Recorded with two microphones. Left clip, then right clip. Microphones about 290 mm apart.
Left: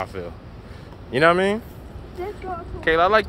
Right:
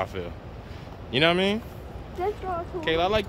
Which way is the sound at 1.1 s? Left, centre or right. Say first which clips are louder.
Left 5 dB; centre.